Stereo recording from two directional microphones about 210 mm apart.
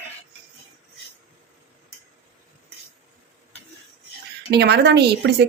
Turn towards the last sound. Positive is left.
turn(degrees=-50)  # may be behind; listen again after turning